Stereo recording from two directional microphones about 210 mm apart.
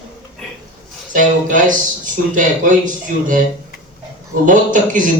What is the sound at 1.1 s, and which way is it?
A man's voice, 40° right (ahead or behind).